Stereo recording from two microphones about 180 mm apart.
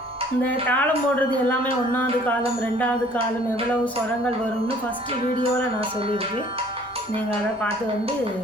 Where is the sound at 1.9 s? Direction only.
10° left (ahead or behind).